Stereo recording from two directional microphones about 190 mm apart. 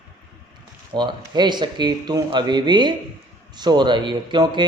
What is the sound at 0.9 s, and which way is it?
A man's voice, 25° right (ahead or behind).